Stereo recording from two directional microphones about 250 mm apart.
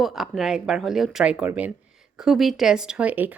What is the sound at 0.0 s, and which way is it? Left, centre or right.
Speech, centre.